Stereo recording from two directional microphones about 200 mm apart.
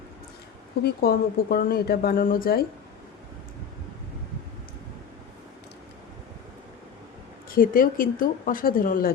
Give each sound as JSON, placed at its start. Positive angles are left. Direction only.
{"t": 0.8, "sound": "speech", "side_deg": 50}
{"t": 7.5, "sound": "speech", "side_deg": 45}